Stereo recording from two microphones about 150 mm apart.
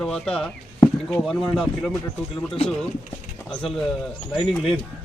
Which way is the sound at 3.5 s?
5° left (ahead or behind).